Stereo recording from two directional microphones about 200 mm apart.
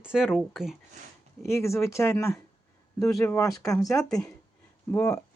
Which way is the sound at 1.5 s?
15° left (ahead or behind).